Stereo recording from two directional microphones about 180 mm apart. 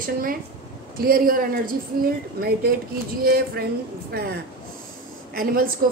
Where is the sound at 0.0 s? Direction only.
50° right (ahead or behind).